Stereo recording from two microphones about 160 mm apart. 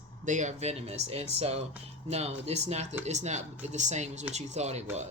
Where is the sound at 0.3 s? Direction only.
50° right (ahead or behind).